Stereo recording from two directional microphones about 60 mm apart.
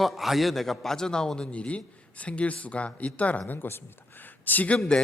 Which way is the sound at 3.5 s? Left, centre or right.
Left.